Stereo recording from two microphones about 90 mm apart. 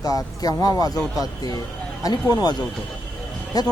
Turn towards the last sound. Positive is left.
turn(degrees=45)  # may be behind; listen again after turning